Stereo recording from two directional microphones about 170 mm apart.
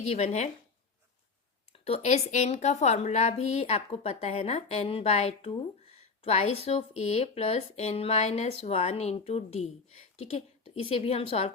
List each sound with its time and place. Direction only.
0.0 s a woman's voice: 40° left (ahead or behind)
1.7 s a woman's voice: 35° left (ahead or behind)